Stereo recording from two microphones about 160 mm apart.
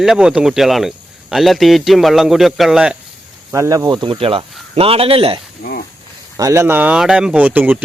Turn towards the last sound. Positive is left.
turn(degrees=-10)  # may be behind; listen again after turning